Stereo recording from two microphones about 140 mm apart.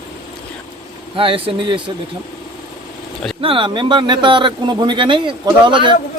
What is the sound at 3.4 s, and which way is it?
Speech, 35° right (ahead or behind).